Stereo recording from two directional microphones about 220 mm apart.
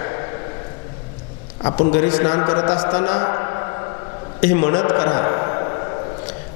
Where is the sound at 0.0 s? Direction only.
20° left (ahead or behind).